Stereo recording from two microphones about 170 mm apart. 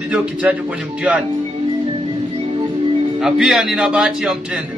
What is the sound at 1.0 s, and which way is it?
Speech, 5° right (ahead or behind).